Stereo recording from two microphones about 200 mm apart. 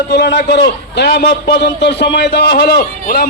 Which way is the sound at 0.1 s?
60° left (ahead or behind).